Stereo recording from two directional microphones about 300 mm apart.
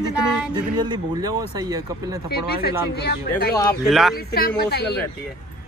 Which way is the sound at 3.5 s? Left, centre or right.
Centre.